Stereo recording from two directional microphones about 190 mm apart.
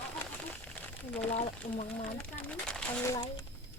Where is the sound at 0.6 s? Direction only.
10° left (ahead or behind).